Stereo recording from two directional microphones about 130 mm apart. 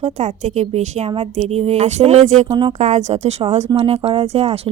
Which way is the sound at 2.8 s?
60° right (ahead or behind).